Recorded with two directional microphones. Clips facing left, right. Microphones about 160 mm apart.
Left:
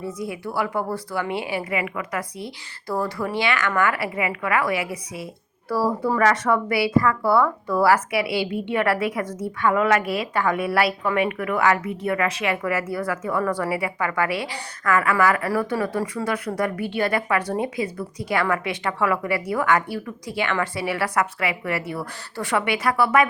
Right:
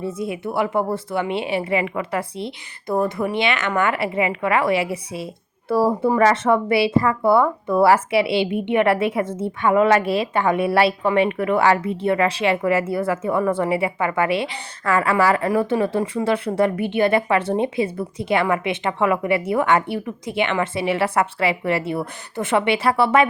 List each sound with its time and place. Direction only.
0.0 s speech: 25° right (ahead or behind)